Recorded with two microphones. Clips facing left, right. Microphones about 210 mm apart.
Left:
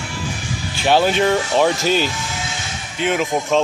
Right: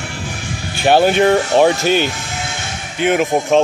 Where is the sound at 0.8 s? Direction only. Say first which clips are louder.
Right 4 dB; 55° right (ahead or behind).